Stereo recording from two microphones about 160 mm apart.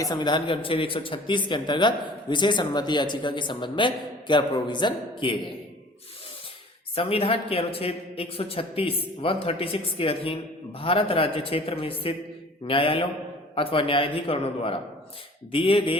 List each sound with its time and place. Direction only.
0.0 s a man's voice: 25° left (ahead or behind)
6.9 s a man's voice: 35° left (ahead or behind)